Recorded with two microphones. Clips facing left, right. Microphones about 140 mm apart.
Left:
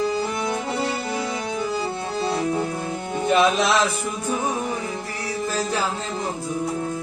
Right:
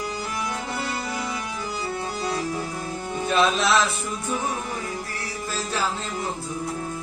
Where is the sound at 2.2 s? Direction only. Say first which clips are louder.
Left 6 dB; 25° left (ahead or behind).